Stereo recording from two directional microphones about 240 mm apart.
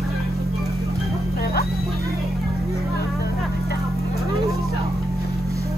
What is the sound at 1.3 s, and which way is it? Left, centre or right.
Music, left.